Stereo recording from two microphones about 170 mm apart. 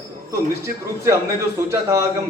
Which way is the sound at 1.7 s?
15° right (ahead or behind).